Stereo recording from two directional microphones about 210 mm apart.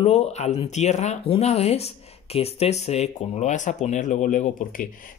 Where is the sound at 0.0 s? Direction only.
30° left (ahead or behind).